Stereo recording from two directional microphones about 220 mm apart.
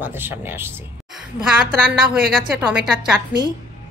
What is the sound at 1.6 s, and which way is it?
Speech, 40° right (ahead or behind).